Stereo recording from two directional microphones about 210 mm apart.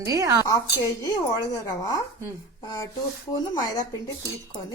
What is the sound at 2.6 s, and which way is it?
A woman's voice, 20° left (ahead or behind).